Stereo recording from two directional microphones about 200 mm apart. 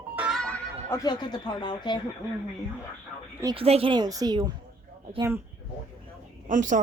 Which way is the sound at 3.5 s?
30° right (ahead or behind).